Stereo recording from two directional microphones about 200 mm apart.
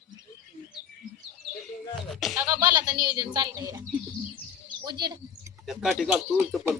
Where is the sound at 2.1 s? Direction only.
Centre (ahead or behind).